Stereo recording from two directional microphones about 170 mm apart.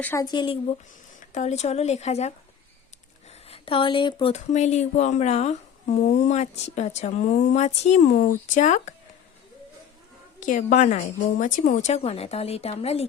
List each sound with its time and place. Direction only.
0.0 s speech: 15° left (ahead or behind)
0.3 s speech: 30° left (ahead or behind)
1.3 s a woman's voice: 45° left (ahead or behind)
3.5 s speech: 30° left (ahead or behind)
4.5 s a woman's voice: 40° left (ahead or behind)
10.4 s a woman's voice: 45° left (ahead or behind)